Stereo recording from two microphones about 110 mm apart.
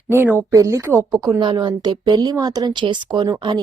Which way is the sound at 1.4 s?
45° right (ahead or behind).